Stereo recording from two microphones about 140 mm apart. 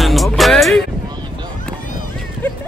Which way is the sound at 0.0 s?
Centre (ahead or behind).